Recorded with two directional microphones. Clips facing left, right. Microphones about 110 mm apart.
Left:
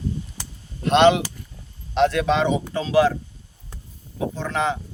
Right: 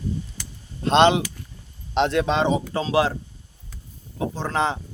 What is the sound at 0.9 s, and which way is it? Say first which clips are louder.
Speech: left 1 dB; 30° right (ahead or behind).